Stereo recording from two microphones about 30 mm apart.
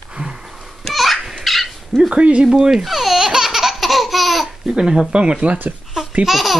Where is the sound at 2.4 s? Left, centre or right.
Right.